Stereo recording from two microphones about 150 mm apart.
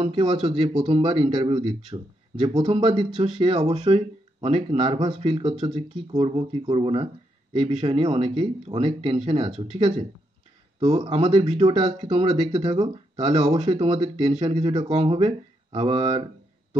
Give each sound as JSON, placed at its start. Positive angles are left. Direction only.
{"t": 0.0, "sound": "speech", "side_deg": -35}